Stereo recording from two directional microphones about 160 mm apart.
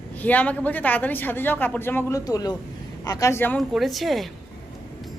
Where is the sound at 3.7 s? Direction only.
Centre (ahead or behind).